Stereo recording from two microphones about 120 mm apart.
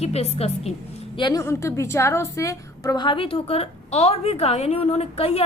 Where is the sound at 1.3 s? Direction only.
25° left (ahead or behind).